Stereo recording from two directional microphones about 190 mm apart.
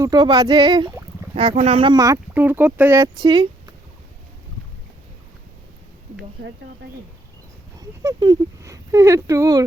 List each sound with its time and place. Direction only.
0.0 s speech: 20° right (ahead or behind)
3.2 s speech: 25° right (ahead or behind)
6.4 s speech: 60° right (ahead or behind)
7.8 s speech: 20° right (ahead or behind)